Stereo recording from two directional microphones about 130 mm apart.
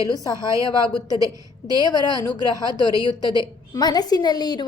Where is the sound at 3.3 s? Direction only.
35° left (ahead or behind).